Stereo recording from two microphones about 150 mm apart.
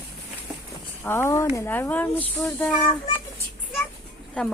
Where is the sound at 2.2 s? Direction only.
5° left (ahead or behind).